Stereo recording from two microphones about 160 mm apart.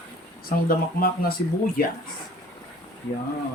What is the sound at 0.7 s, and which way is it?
Speech, 70° left (ahead or behind).